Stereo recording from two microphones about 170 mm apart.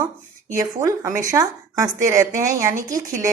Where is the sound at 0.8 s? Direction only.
20° right (ahead or behind).